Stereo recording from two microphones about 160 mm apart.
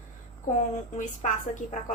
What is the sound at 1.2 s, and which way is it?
Speech, 50° left (ahead or behind).